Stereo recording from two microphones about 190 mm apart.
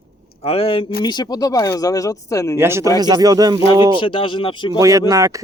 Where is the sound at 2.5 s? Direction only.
15° right (ahead or behind).